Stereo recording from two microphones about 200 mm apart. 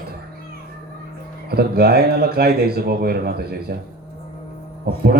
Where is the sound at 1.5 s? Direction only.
50° right (ahead or behind).